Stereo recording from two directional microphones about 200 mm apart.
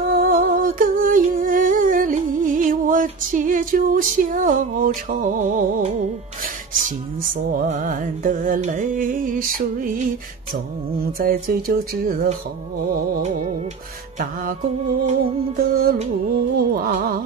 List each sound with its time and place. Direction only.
0.1 s humming: 45° right (ahead or behind)
7.2 s music: 40° right (ahead or behind)
11.1 s speech: 45° right (ahead or behind)
13.1 s music: 35° right (ahead or behind)
15.0 s speech: 45° right (ahead or behind)